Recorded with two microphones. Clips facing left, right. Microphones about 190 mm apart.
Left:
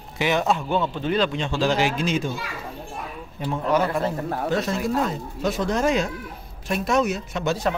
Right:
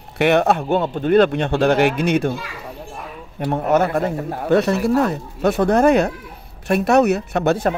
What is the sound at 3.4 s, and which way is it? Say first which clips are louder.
Speech: right 5 dB; 55° right (ahead or behind).